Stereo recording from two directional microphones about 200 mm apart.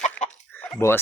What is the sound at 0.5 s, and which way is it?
Drip, 5° left (ahead or behind).